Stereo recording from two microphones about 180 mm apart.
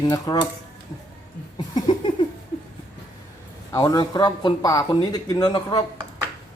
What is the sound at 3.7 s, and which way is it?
Speech, 20° left (ahead or behind).